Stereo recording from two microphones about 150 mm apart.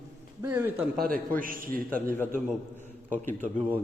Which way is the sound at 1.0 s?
75° right (ahead or behind).